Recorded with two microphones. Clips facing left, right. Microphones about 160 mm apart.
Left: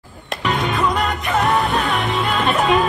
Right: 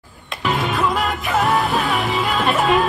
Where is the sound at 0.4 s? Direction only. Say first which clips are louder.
Even; centre (ahead or behind).